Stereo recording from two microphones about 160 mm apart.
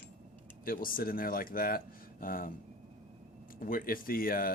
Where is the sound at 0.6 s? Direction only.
65° left (ahead or behind).